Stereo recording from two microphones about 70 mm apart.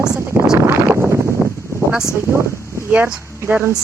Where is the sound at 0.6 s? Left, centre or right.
Right.